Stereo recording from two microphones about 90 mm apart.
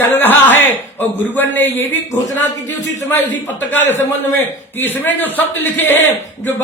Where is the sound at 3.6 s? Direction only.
20° left (ahead or behind).